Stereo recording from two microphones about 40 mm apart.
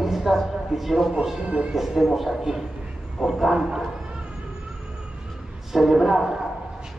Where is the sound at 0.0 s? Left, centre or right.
Centre.